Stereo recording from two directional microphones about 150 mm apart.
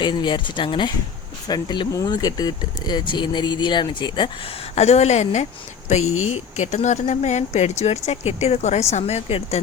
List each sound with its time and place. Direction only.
0.0 s speech: 30° left (ahead or behind)
4.7 s speech: 50° left (ahead or behind)